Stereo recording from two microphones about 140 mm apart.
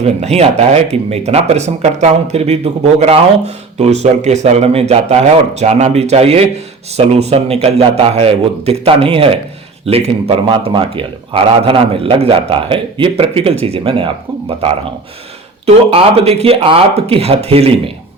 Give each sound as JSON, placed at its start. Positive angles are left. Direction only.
{"t": 0.0, "sound": "a man's voice", "side_deg": -50}